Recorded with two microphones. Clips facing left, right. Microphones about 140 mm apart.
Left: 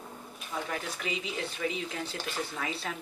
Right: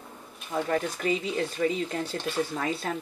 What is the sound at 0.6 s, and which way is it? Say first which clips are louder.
Speech: right 9 dB; 50° right (ahead or behind).